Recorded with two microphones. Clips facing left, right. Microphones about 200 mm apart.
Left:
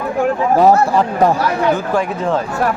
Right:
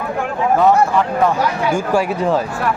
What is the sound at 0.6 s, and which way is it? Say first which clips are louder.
Speech: left 2 dB; 35° left (ahead or behind).